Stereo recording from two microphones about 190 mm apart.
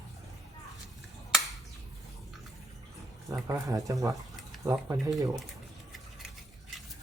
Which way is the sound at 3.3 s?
15° right (ahead or behind).